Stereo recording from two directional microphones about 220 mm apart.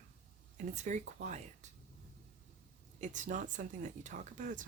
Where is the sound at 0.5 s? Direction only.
35° right (ahead or behind).